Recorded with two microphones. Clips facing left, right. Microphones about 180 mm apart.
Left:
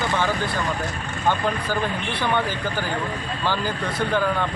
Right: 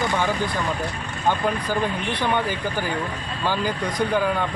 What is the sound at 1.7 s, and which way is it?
Speech, 20° right (ahead or behind).